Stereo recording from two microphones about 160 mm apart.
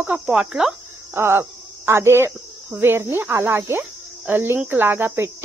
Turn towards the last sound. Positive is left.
turn(degrees=-15)  # may be behind; listen again after turning